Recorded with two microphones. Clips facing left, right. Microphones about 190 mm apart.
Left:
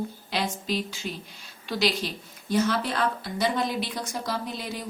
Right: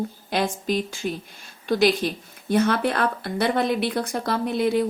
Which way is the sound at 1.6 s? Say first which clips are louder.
Right 7 dB; 50° right (ahead or behind).